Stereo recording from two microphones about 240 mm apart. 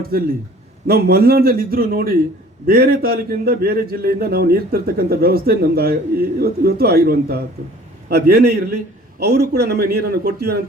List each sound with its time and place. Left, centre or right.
0.9 s a man's voice: right